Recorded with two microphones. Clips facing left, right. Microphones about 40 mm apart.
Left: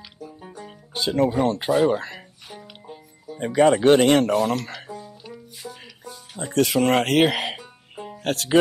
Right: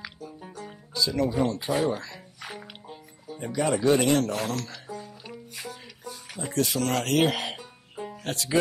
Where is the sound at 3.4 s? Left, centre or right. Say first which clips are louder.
Left 8 dB; left.